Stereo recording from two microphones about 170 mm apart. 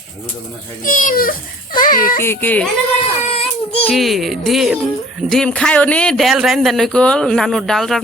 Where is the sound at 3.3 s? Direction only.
35° left (ahead or behind).